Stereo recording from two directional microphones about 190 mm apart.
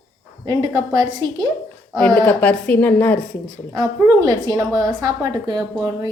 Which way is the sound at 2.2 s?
5° left (ahead or behind).